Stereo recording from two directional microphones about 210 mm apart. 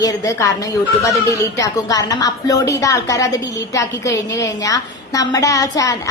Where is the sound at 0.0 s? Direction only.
15° left (ahead or behind).